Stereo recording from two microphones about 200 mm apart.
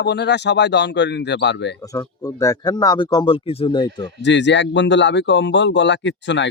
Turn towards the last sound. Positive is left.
turn(degrees=65)  # may be behind; listen again after turning